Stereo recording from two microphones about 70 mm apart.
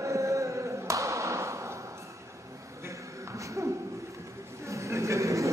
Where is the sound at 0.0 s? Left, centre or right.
Right.